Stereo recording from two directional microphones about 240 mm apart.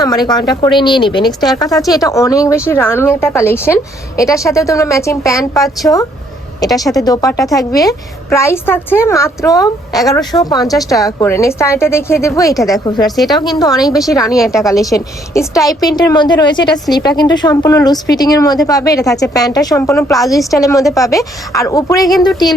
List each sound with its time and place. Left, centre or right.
0.0 s a woman's voice: centre
14.3 s a woman's voice: centre
14.5 s a woman's voice: centre